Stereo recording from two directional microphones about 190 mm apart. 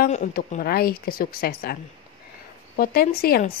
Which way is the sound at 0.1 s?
45° left (ahead or behind).